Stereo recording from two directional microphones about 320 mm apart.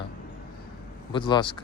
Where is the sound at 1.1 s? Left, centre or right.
Centre.